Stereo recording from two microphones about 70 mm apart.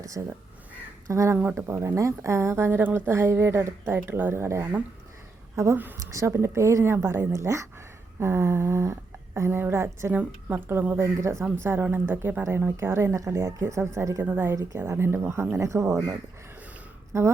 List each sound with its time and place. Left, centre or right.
0.2 s speech: right
9.5 s speech: right
11.6 s speech: right
14.2 s a woman's voice: right
17.1 s a woman's voice: right